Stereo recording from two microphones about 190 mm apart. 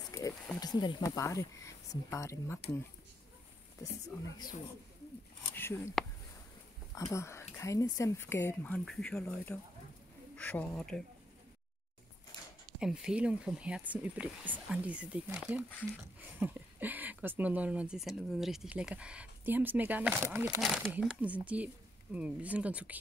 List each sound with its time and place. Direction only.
0.1 s a sound: 20° left (ahead or behind)
0.6 s speech: 20° left (ahead or behind)
5.5 s speech: 10° left (ahead or behind)
12.8 s speech: 5° right (ahead or behind)
20.6 s speech: 5° left (ahead or behind)